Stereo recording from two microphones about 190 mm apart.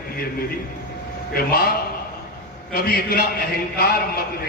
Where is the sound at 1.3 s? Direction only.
50° left (ahead or behind).